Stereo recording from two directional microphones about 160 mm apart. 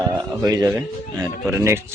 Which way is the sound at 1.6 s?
15° right (ahead or behind).